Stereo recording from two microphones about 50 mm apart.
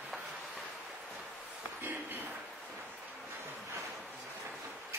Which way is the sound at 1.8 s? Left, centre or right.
Right.